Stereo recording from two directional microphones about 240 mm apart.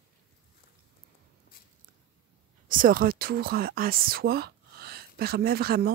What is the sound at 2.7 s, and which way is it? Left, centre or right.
Speech, right.